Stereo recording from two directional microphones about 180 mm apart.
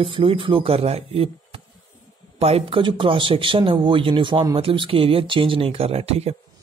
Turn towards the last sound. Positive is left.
turn(degrees=-35)  # may be behind; listen again after turning